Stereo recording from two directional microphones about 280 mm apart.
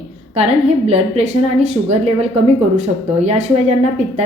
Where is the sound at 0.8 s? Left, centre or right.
Right.